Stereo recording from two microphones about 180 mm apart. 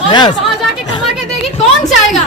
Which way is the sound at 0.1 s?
25° left (ahead or behind).